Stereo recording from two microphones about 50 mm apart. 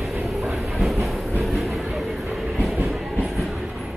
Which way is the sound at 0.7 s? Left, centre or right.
Centre.